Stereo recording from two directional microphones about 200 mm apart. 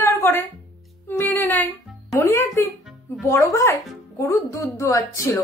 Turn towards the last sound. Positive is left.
turn(degrees=15)  # may be behind; listen again after turning